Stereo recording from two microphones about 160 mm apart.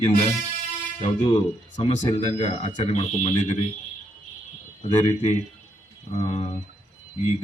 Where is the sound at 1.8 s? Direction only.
35° left (ahead or behind).